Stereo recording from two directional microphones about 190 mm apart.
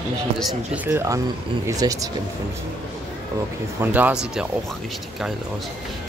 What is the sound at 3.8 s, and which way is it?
Speech, 10° right (ahead or behind).